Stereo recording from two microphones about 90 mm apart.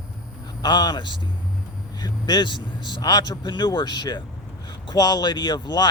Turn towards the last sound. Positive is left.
turn(degrees=50)  # may be behind; listen again after turning